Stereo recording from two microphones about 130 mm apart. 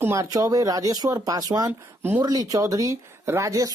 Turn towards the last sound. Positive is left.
turn(degrees=-25)  # may be behind; listen again after turning